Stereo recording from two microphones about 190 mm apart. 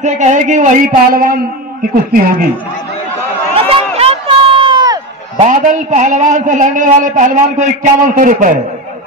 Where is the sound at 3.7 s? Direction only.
30° right (ahead or behind).